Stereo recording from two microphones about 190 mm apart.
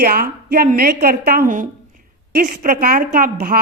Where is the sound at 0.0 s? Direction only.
50° right (ahead or behind).